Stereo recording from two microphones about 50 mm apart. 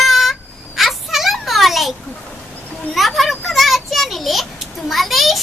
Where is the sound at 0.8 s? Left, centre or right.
Centre.